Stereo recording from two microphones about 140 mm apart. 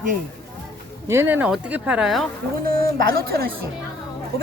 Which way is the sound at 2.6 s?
90° right.